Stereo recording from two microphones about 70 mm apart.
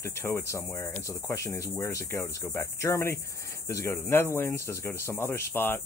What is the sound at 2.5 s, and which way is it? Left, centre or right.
Speech, left.